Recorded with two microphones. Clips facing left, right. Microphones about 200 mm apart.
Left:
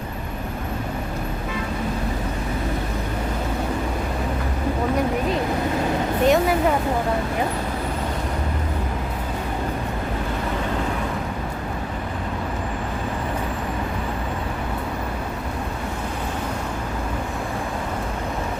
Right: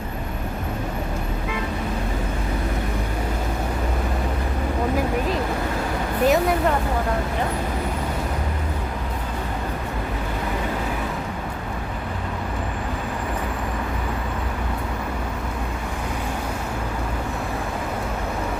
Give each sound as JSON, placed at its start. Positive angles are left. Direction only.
{"t": 6.2, "sound": "music", "side_deg": 0}